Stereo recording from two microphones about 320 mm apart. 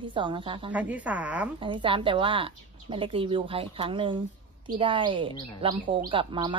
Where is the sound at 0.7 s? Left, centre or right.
Centre.